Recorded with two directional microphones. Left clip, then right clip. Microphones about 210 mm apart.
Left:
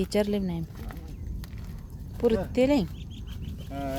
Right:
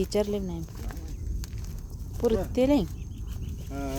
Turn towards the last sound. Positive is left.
turn(degrees=30)  # may be behind; listen again after turning